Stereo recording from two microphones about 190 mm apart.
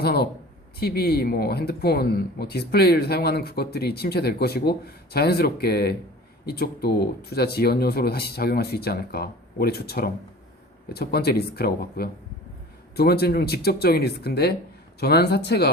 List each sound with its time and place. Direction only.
0.0 s speech: 55° left (ahead or behind)